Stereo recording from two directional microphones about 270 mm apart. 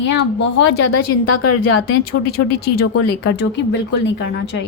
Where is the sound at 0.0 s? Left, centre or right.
Left.